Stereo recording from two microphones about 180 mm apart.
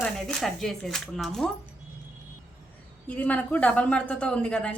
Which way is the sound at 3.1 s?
5° left (ahead or behind).